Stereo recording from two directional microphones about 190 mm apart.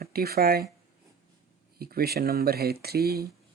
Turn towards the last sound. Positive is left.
turn(degrees=-55)  # may be behind; listen again after turning